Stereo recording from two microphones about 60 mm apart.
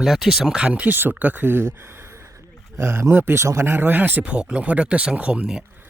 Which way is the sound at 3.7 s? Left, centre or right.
Right.